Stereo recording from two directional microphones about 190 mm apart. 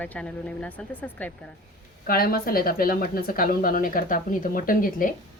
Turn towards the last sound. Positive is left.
turn(degrees=45)  # may be behind; listen again after turning